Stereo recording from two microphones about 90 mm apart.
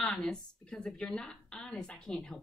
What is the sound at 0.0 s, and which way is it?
A woman's voice, 10° left (ahead or behind).